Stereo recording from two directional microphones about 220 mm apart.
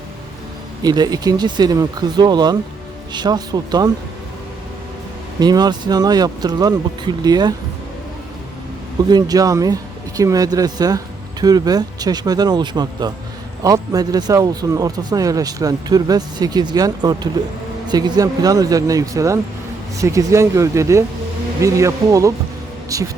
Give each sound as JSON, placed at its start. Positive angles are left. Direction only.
{"t": 0.8, "sound": "a man's voice", "side_deg": -15}
{"t": 5.4, "sound": "speech", "side_deg": -20}
{"t": 9.0, "sound": "a man's voice", "side_deg": -15}